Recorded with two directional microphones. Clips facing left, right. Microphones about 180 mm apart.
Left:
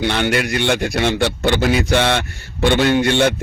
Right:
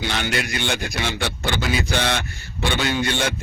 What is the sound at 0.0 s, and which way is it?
A man's voice, 55° left (ahead or behind).